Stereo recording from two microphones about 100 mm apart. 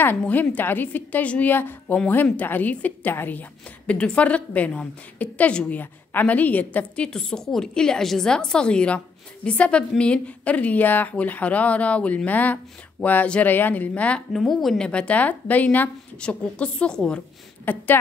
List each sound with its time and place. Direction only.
0.2 s a woman's voice: 15° left (ahead or behind)
14.4 s a woman's voice: centre (ahead or behind)
14.9 s a woman's voice: 10° left (ahead or behind)